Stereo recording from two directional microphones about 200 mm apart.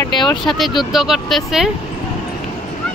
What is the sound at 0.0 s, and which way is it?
Speech, 20° left (ahead or behind).